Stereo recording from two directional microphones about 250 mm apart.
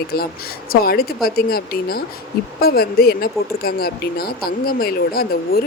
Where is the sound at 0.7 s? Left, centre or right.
Left.